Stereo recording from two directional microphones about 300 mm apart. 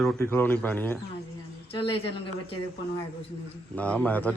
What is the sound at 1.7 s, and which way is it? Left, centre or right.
Speech, centre.